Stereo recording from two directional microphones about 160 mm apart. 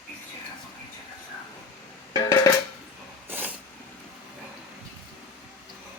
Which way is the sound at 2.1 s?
25° left (ahead or behind).